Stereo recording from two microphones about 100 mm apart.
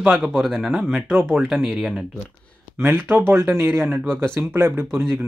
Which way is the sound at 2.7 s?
25° right (ahead or behind).